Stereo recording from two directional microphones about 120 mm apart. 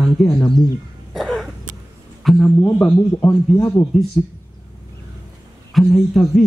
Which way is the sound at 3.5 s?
20° left (ahead or behind).